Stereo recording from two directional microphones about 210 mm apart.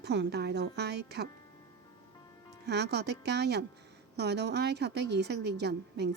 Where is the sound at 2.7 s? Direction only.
50° right (ahead or behind).